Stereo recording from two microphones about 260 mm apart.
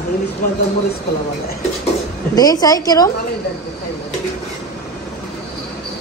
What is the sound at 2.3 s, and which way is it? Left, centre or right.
Speech, centre.